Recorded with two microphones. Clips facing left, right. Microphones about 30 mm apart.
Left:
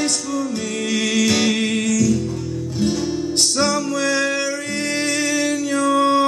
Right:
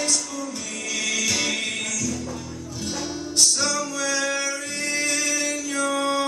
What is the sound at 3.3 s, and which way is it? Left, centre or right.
Music, left.